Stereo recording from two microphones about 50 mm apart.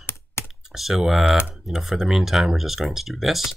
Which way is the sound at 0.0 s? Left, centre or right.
Left.